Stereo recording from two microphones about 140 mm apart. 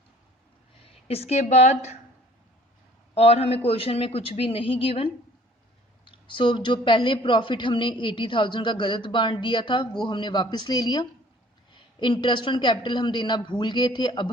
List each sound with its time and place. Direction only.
1.0 s a man's voice: 45° left (ahead or behind)
3.2 s a man's voice: 45° left (ahead or behind)
6.1 s a woman's voice: 35° left (ahead or behind)